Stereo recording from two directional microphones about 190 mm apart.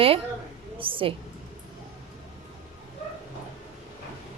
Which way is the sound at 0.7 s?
25° right (ahead or behind).